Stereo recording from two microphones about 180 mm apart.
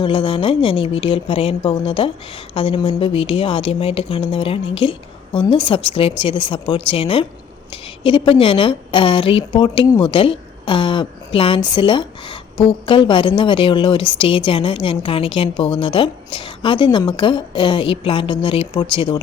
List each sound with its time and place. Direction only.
0.0 s speech: 30° left (ahead or behind)